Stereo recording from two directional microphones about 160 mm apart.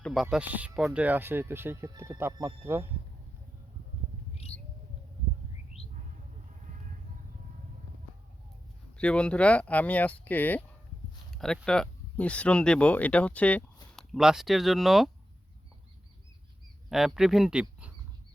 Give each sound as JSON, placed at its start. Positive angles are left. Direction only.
{"t": 0.0, "sound": "speech", "side_deg": 0}
{"t": 9.0, "sound": "speech", "side_deg": 5}
{"t": 13.9, "sound": "speech", "side_deg": 0}
{"t": 16.9, "sound": "speech", "side_deg": 0}